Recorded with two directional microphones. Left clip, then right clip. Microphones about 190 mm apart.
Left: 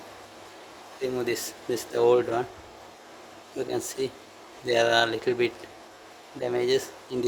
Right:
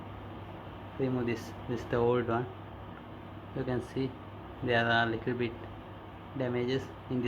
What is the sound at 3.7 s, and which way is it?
Speech, 60° left (ahead or behind).